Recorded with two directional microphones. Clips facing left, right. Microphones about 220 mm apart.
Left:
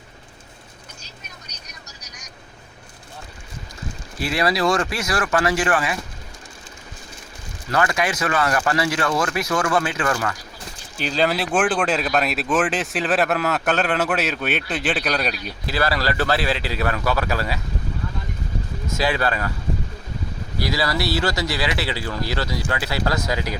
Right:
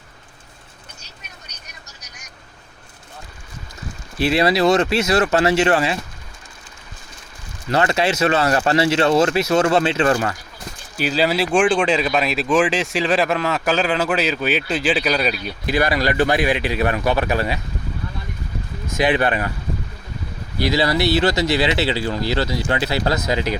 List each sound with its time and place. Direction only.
4.2 s speech: 25° right (ahead or behind)
7.7 s speech: 25° right (ahead or behind)
10.9 s speech: 5° right (ahead or behind)
15.6 s speech: 15° right (ahead or behind)
18.9 s speech: 20° right (ahead or behind)
20.6 s speech: 25° right (ahead or behind)